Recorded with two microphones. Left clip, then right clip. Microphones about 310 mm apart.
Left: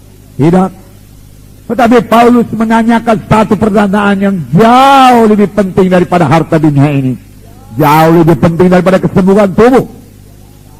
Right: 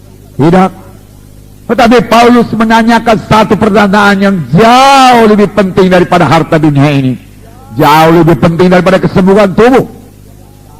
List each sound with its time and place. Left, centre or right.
0.4 s a man's voice: right